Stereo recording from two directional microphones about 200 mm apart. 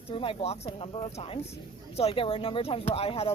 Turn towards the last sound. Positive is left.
turn(degrees=30)  # may be behind; listen again after turning